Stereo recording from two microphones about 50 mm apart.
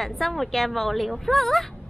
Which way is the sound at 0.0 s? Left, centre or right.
Centre.